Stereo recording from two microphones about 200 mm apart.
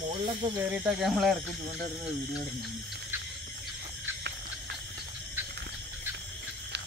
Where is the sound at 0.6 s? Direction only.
5° right (ahead or behind).